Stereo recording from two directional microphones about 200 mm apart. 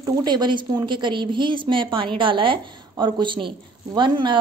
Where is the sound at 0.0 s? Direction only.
20° right (ahead or behind).